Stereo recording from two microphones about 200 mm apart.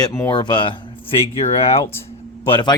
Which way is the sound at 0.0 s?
15° left (ahead or behind).